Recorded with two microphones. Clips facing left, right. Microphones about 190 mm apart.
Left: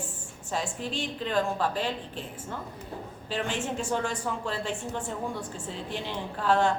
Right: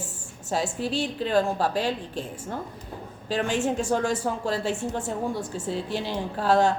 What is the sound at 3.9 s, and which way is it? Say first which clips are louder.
A woman's voice: right 5 dB; 40° right (ahead or behind).